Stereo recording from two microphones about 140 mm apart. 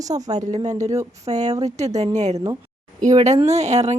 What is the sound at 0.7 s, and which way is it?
Speech, 25° right (ahead or behind).